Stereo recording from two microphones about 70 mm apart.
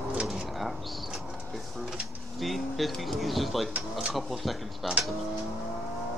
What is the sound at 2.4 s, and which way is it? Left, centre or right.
Music, centre.